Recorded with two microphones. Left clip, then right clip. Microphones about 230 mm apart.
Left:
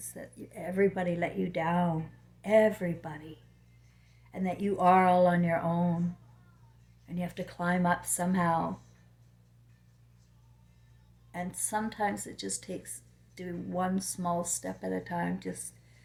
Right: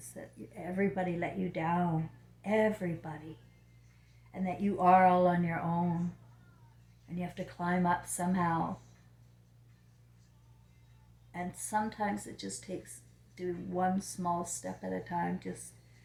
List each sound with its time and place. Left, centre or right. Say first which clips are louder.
0.1 s speech: left 1 dB; left
4.3 s speech: left 3 dB; left
7.2 s speech: left 3 dB; left
11.3 s speech: left 2 dB; left